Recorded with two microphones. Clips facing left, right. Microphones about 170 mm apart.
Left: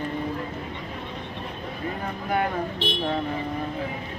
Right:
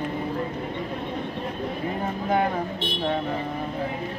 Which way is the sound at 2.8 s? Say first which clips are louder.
Left 2 dB; 90° left.